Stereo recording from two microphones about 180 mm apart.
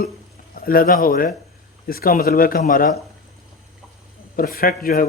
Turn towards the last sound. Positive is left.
turn(degrees=50)  # may be behind; listen again after turning